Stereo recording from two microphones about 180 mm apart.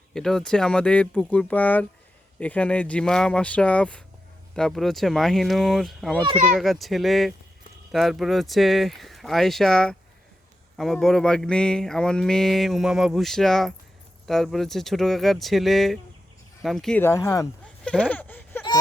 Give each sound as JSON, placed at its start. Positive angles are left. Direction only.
{"t": 0.1, "sound": "speech", "side_deg": 5}
{"t": 17.0, "sound": "speech", "side_deg": 15}
{"t": 17.8, "sound": "speech", "side_deg": 5}